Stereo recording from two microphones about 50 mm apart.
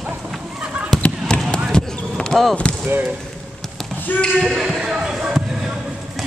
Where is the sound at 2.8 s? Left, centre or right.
Right.